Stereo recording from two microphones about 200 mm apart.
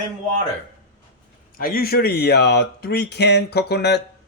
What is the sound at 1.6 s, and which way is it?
Speech, 45° left (ahead or behind).